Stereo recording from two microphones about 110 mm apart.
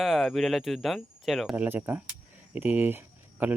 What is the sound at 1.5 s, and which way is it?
Speech, 15° right (ahead or behind).